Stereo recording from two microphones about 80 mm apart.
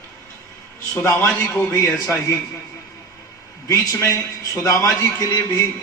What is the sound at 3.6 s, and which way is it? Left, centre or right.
A man's voice, left.